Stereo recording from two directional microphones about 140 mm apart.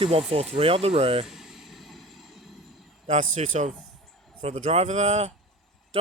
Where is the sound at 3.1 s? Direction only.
55° right (ahead or behind).